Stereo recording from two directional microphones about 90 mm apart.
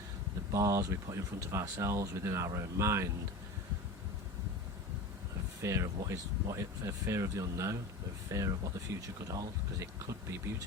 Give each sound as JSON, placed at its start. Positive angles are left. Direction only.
{"t": 0.5, "sound": "speech", "side_deg": -40}
{"t": 5.6, "sound": "speech", "side_deg": -35}